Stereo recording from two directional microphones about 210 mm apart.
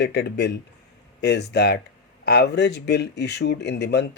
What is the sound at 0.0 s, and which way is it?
Speech, 50° left (ahead or behind).